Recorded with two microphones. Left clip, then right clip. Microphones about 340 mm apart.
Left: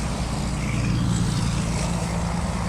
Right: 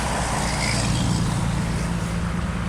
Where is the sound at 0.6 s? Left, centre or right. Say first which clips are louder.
Right 5 dB; centre.